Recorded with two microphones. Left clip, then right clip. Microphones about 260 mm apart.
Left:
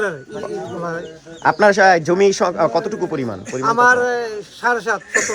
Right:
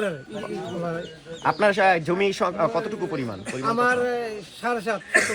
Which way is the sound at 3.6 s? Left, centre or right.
Centre.